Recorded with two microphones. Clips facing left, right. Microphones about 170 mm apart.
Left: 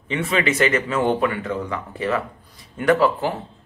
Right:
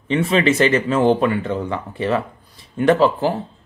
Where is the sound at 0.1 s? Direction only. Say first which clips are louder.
Right 5 dB; 30° right (ahead or behind).